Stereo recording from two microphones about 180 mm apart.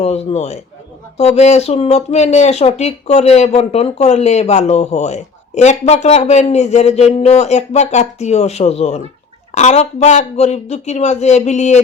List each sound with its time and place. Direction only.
0.0 s speech: 35° left (ahead or behind)